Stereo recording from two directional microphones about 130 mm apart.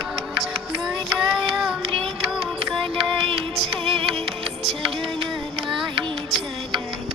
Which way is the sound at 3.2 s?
45° right (ahead or behind).